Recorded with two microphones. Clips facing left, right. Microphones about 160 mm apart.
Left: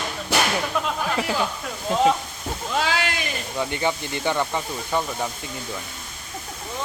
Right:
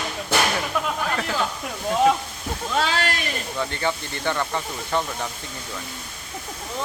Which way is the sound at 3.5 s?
15° left (ahead or behind).